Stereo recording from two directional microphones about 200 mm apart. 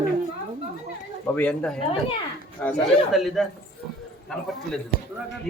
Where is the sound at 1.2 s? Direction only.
10° left (ahead or behind).